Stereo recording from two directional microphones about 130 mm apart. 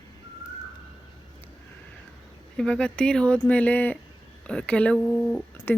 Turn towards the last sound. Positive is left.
turn(degrees=10)  # may be behind; listen again after turning